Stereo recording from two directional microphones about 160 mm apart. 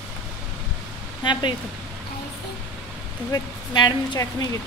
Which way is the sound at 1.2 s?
30° left (ahead or behind).